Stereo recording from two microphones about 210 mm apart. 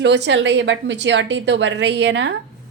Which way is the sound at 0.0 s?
55° right (ahead or behind).